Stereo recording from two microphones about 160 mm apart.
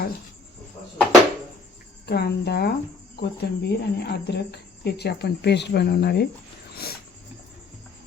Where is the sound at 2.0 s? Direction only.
90° left.